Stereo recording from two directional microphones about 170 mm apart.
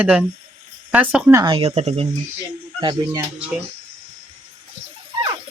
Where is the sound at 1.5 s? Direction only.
35° right (ahead or behind).